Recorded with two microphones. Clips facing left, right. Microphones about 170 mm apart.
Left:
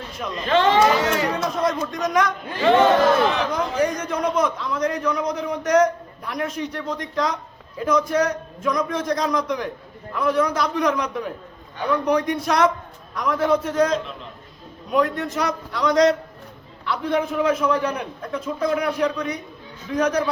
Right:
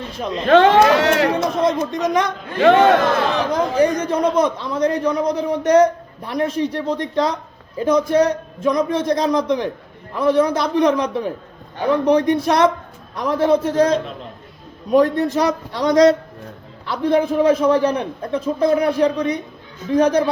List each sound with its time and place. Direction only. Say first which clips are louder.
0.4 s speech: right 5 dB; 60° right (ahead or behind)
1.6 s a man's voice: right 4 dB; 20° right (ahead or behind)
2.6 s speech: right 4 dB; 65° right (ahead or behind)
3.8 s a man's voice: right 6 dB; 30° right (ahead or behind)